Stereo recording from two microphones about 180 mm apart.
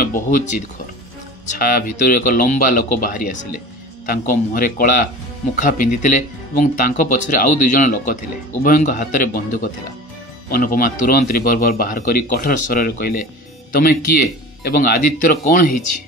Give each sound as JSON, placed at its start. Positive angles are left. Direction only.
{"t": 0.0, "sound": "speech", "side_deg": 50}
{"t": 1.6, "sound": "a man's voice", "side_deg": 55}